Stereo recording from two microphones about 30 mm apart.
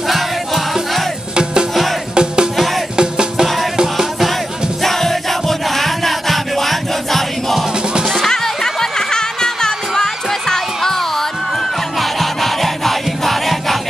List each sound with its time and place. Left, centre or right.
1.3 s music: right
2.5 s music: centre
3.0 s music: right
3.9 s music: centre
4.8 s music: centre
8.3 s music: centre